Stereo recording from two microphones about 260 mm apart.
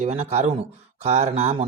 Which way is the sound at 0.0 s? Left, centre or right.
Right.